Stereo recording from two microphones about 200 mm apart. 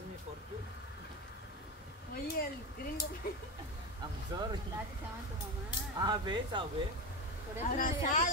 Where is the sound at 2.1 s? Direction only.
50° left (ahead or behind).